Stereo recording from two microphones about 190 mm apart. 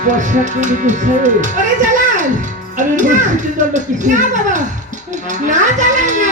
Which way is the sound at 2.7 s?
40° right (ahead or behind).